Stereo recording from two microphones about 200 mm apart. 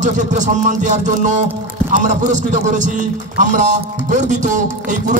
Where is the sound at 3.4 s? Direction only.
40° right (ahead or behind).